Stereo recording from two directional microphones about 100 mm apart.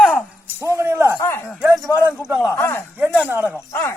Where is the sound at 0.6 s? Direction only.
30° right (ahead or behind).